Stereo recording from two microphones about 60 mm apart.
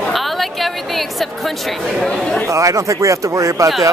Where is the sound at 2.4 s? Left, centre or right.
Right.